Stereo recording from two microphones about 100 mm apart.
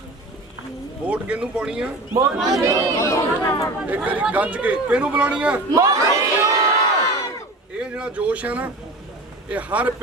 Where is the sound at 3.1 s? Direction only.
30° left (ahead or behind).